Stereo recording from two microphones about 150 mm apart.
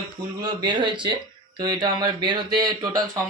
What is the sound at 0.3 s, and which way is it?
A man's voice, 30° right (ahead or behind).